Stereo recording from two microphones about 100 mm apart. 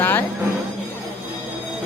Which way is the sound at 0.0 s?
20° left (ahead or behind).